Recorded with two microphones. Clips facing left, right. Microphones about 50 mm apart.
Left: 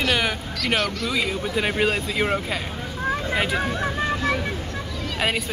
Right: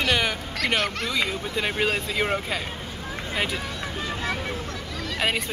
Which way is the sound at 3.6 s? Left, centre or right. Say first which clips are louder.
Left 7 dB; left.